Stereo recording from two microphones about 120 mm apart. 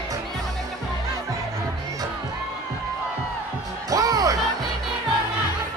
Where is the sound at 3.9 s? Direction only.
30° right (ahead or behind).